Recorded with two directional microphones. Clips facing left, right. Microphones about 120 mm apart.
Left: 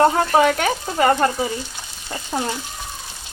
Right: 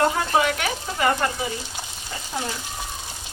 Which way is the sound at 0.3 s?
40° left (ahead or behind).